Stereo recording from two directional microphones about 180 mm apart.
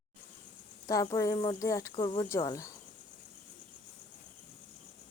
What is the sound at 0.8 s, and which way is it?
Speech, 20° left (ahead or behind).